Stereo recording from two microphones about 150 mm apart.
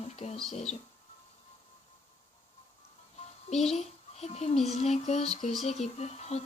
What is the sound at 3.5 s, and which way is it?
Speech, 45° left (ahead or behind).